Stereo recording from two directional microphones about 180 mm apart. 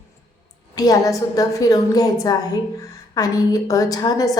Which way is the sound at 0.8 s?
20° left (ahead or behind).